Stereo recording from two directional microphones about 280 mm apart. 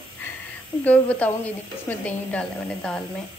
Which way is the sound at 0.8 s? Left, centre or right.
Centre.